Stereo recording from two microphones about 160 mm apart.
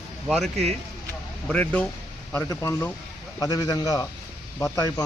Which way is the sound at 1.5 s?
10° left (ahead or behind).